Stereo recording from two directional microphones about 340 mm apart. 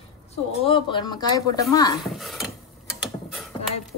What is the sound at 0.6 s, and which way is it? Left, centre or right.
A woman's voice, centre.